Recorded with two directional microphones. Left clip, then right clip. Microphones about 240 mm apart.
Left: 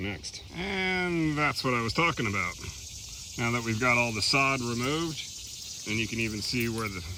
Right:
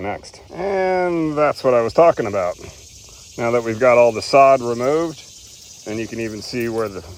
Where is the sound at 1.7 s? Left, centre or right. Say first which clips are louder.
Right 18 dB; left.